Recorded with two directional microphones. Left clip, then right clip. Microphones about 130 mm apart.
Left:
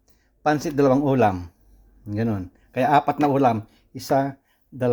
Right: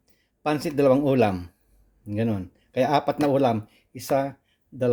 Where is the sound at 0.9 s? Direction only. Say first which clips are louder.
Left 2 dB; 25° right (ahead or behind).